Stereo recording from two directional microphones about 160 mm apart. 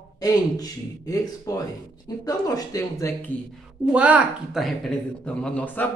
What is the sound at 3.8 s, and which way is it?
Speech, 10° right (ahead or behind).